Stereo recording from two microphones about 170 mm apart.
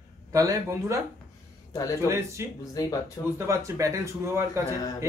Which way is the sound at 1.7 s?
20° left (ahead or behind).